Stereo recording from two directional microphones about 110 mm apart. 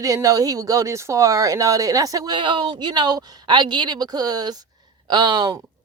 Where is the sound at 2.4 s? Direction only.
45° right (ahead or behind).